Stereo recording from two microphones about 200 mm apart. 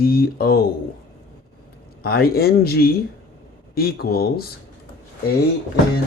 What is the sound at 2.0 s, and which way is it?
Speech, 50° left (ahead or behind).